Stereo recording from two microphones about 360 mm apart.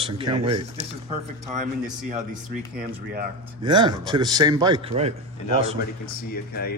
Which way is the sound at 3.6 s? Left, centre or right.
Centre.